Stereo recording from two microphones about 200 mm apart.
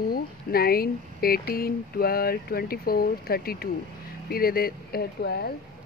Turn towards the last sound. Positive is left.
turn(degrees=55)  # may be behind; listen again after turning